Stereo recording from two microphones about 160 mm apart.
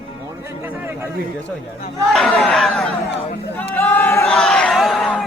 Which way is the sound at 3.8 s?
10° left (ahead or behind).